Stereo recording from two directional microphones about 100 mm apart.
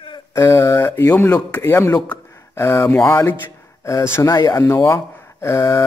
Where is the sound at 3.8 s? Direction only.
30° left (ahead or behind).